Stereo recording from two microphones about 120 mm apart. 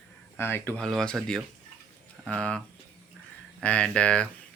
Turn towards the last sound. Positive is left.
turn(degrees=10)  # may be behind; listen again after turning